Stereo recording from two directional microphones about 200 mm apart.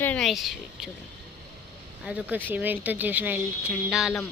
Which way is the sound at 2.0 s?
5° right (ahead or behind).